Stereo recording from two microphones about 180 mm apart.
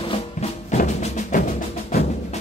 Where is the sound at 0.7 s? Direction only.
45° left (ahead or behind).